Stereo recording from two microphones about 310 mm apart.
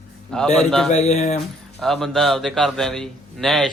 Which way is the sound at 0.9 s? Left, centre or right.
Left.